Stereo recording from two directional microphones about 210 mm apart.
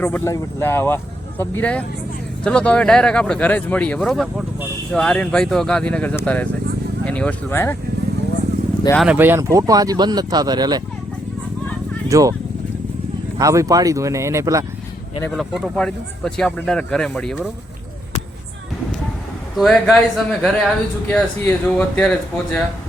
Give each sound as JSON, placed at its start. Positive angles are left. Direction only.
{"t": 0.0, "sound": "speech", "side_deg": 10}
{"t": 9.0, "sound": "speech", "side_deg": -5}
{"t": 12.0, "sound": "speech", "side_deg": -15}
{"t": 13.4, "sound": "speech", "side_deg": -15}
{"t": 15.2, "sound": "speech", "side_deg": 0}
{"t": 19.5, "sound": "speech", "side_deg": 0}